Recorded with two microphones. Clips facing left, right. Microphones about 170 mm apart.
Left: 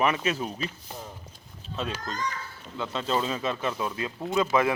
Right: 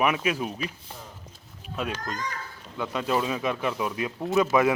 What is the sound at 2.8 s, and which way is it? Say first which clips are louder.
Speech: right 2 dB; 15° right (ahead or behind).